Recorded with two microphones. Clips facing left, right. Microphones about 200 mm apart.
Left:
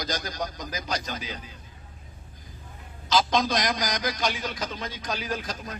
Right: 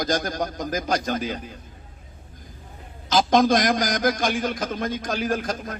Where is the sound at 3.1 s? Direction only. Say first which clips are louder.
Right 6 dB; 50° right (ahead or behind).